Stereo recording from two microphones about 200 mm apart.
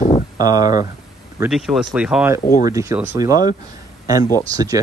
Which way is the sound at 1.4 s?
Centre (ahead or behind).